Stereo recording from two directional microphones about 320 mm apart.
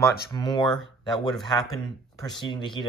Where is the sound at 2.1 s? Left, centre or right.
Centre.